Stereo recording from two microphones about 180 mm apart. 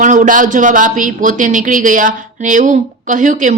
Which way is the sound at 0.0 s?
45° right (ahead or behind).